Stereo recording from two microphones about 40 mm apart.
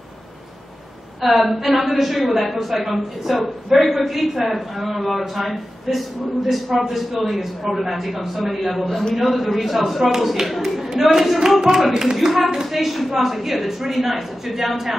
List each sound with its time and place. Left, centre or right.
1.2 s a woman's voice: centre
8.8 s a man's voice: centre
10.4 s a sound: centre
11.1 s a woman's voice: centre